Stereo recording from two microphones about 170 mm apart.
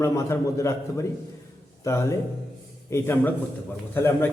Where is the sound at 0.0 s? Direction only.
15° left (ahead or behind).